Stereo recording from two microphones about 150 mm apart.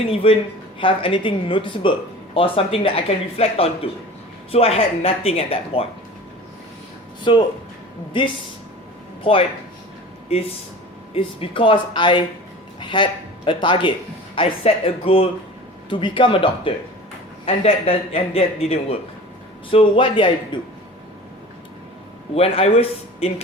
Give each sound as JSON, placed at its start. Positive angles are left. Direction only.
{"t": 0.1, "sound": "speech", "side_deg": 40}
{"t": 7.3, "sound": "speech", "side_deg": 35}
{"t": 9.2, "sound": "speech", "side_deg": 35}
{"t": 11.1, "sound": "a man's voice", "side_deg": 40}
{"t": 22.4, "sound": "speech", "side_deg": 40}